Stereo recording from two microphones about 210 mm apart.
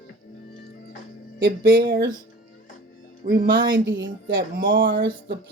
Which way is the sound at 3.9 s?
60° right (ahead or behind).